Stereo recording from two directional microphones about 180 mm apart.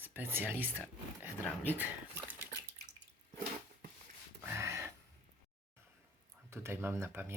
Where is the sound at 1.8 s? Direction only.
10° right (ahead or behind).